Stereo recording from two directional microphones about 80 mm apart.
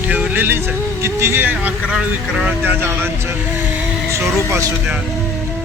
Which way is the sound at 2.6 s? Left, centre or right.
Right.